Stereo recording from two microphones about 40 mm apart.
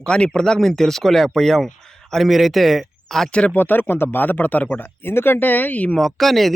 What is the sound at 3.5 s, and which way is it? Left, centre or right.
Speech, left.